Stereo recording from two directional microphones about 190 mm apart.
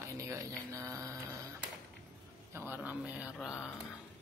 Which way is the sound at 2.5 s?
10° right (ahead or behind).